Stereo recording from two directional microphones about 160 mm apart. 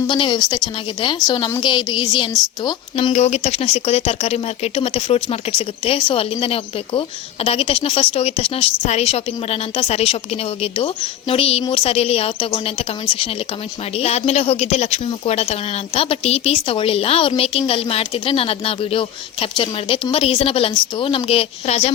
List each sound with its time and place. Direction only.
0.1 s a woman's voice: 30° left (ahead or behind)
2.9 s a woman's voice: 45° left (ahead or behind)
13.9 s a woman's voice: 40° left (ahead or behind)